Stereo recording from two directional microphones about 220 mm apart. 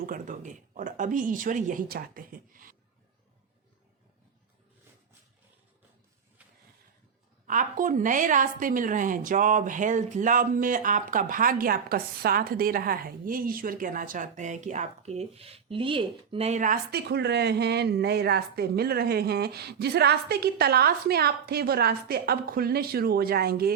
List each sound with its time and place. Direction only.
0.0 s speech: 35° right (ahead or behind)
7.4 s a woman's voice: 40° right (ahead or behind)